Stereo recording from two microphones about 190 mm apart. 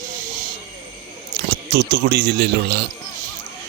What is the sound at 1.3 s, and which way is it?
Speech, 55° right (ahead or behind).